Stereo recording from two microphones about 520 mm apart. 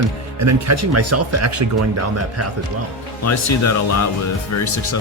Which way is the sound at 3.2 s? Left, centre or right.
Left.